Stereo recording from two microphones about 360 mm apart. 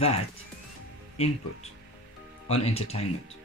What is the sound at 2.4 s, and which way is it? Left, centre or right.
Speech, centre.